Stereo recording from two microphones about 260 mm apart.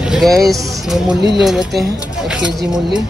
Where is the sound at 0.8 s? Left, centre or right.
Centre.